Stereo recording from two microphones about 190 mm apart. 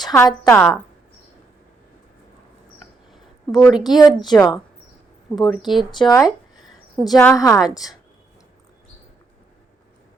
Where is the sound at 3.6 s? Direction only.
5° right (ahead or behind).